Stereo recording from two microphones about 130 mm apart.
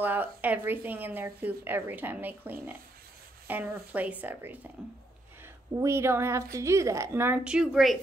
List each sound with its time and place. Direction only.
0.0 s speech: 15° right (ahead or behind)
5.7 s a woman's voice: 20° right (ahead or behind)
7.4 s speech: 5° right (ahead or behind)